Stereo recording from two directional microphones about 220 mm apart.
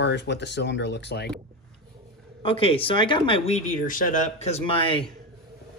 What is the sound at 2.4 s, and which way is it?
Speech, 25° left (ahead or behind).